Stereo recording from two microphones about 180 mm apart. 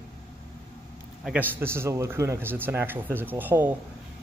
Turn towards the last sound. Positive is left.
turn(degrees=-10)  # may be behind; listen again after turning